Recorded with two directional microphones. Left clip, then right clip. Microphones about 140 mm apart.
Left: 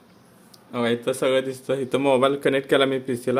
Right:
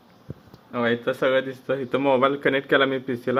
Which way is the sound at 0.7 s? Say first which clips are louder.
Even; 25° left (ahead or behind).